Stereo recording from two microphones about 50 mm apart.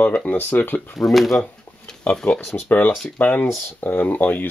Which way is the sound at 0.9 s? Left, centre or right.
Centre.